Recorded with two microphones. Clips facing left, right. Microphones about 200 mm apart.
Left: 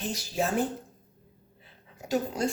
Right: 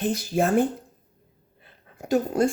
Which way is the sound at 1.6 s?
55° right (ahead or behind).